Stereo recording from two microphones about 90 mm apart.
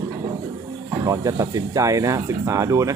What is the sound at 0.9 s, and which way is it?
Speech, 40° right (ahead or behind).